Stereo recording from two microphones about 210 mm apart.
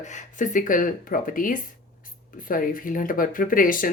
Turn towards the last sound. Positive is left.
turn(degrees=40)  # may be behind; listen again after turning